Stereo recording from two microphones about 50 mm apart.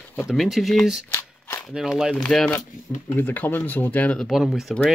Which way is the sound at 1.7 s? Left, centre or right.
Centre.